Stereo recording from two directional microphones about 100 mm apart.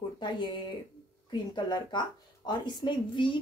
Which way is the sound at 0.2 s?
50° left (ahead or behind).